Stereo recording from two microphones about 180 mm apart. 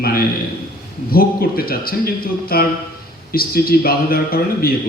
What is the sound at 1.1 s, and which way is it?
A man's voice, 55° left (ahead or behind).